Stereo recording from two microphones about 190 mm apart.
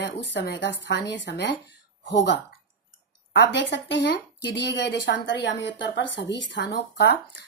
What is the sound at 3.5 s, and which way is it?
Speech, 70° left (ahead or behind).